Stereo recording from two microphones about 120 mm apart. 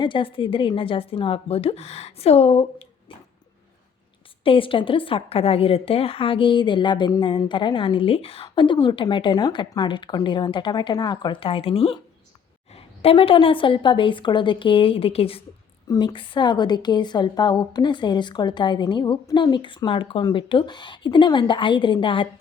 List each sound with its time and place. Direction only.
0.0 s a woman's voice: 45° left (ahead or behind); by 2.8 s 60° left (ahead or behind)
4.4 s a woman's voice: 45° left (ahead or behind)
8.4 s a woman's voice: 40° left (ahead or behind)
15.9 s a woman's voice: 40° left (ahead or behind)